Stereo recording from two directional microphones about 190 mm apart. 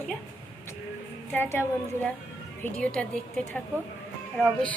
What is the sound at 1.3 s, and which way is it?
A woman's voice, 10° left (ahead or behind).